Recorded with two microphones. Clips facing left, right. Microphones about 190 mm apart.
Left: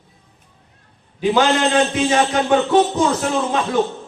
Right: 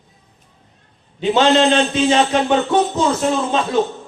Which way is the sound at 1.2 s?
25° right (ahead or behind).